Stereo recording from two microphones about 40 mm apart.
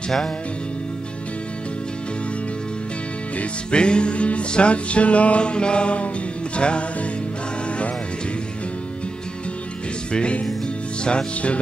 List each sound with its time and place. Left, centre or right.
3.7 s music: left
10.1 s music: left